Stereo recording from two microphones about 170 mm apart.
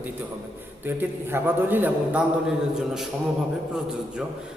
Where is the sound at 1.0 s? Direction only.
10° right (ahead or behind).